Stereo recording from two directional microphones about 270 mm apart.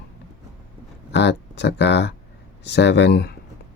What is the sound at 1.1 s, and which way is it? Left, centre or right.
Speech, left.